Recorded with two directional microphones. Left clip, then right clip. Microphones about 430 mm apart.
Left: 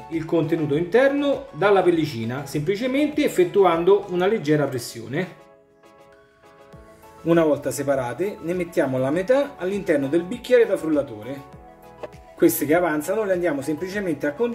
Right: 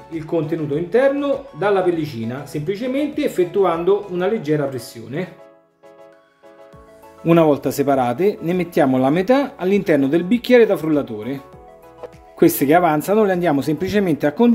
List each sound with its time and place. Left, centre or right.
0.1 s speech: centre
7.2 s speech: centre
12.4 s speech: centre